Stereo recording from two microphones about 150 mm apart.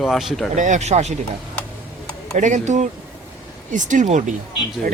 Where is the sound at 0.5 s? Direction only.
55° right (ahead or behind).